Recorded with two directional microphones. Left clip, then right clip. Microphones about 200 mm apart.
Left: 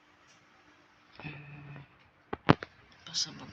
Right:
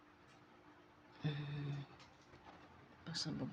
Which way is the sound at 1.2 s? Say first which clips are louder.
Left 2 dB; 55° right (ahead or behind).